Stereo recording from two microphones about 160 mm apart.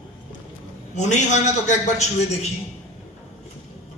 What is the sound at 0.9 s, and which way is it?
A man's voice, 50° left (ahead or behind).